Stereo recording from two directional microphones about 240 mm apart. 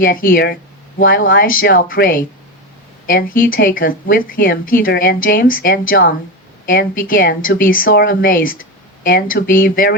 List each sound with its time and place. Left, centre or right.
0.0 s a woman's voice: left